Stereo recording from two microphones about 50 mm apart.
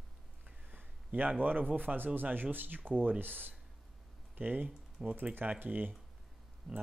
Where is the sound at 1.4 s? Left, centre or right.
Right.